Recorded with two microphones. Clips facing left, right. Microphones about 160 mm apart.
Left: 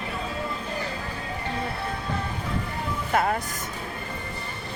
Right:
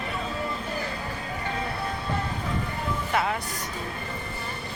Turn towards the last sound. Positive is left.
turn(degrees=45)  # may be behind; listen again after turning